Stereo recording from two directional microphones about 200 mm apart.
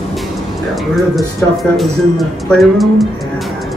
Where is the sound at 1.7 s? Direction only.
Centre (ahead or behind).